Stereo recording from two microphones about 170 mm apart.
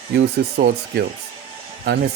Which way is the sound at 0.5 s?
65° right (ahead or behind).